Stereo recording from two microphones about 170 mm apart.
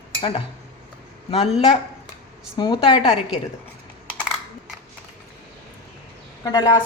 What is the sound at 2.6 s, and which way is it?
Speech, 25° left (ahead or behind).